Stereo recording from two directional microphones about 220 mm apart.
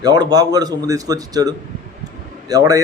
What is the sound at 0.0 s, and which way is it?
A man's voice, 20° right (ahead or behind).